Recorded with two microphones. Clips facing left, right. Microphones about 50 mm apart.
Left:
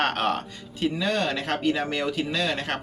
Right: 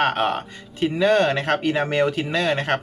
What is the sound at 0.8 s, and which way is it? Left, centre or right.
Speech, right.